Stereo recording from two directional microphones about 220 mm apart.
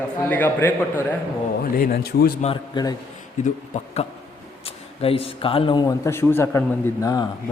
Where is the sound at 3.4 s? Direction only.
30° left (ahead or behind).